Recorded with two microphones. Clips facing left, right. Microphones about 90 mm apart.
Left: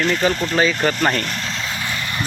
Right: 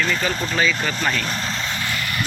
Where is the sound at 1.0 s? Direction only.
55° left (ahead or behind).